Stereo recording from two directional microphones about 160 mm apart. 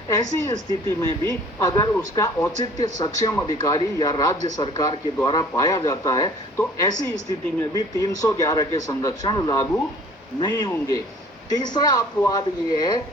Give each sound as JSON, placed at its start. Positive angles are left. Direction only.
{"t": 0.1, "sound": "speech", "side_deg": 20}